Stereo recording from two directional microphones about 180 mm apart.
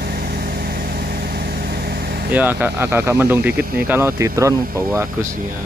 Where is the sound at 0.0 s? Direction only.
55° right (ahead or behind).